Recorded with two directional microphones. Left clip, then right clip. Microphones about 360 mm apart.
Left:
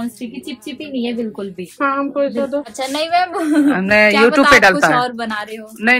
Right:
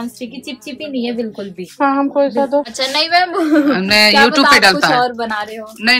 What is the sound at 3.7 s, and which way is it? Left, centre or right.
Speech, centre.